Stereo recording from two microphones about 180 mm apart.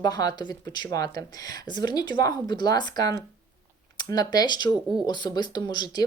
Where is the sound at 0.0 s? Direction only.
20° left (ahead or behind).